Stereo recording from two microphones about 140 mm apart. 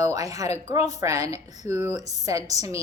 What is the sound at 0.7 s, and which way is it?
A woman's voice, 25° right (ahead or behind).